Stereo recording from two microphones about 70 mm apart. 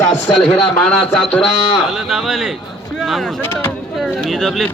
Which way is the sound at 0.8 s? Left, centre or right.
Centre.